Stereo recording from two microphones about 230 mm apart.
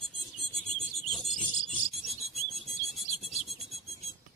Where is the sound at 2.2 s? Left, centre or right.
Right.